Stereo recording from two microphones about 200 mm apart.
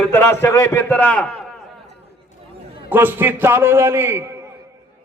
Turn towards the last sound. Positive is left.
turn(degrees=-10)  # may be behind; listen again after turning